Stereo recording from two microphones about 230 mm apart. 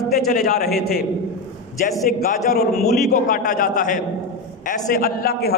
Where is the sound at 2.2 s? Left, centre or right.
Left.